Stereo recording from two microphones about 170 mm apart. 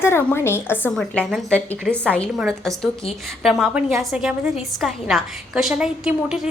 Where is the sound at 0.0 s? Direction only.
15° left (ahead or behind).